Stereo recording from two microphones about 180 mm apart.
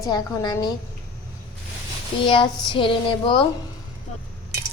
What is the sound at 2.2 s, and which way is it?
A woman's voice, 25° left (ahead or behind).